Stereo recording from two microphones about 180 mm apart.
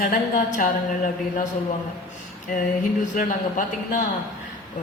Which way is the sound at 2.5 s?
50° left (ahead or behind).